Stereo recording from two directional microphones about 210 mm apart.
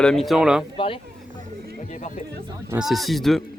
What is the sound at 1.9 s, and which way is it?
Music, 35° left (ahead or behind).